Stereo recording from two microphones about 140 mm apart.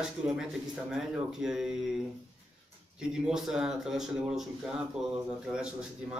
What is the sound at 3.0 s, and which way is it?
Speech, 5° right (ahead or behind).